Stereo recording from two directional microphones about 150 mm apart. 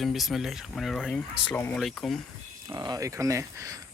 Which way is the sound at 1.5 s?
15° left (ahead or behind).